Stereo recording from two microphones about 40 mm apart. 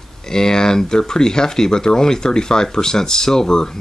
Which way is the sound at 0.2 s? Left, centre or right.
Centre.